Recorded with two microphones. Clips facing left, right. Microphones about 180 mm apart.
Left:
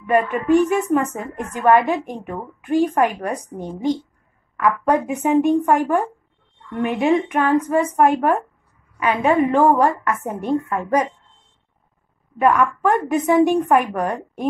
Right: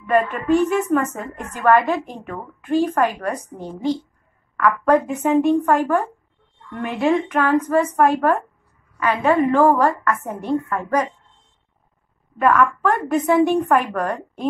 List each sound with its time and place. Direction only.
0.0 s a woman's voice: 15° left (ahead or behind)
12.4 s a woman's voice: 15° left (ahead or behind)